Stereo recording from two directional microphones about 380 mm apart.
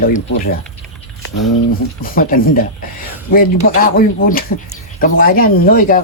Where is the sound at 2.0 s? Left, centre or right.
Left.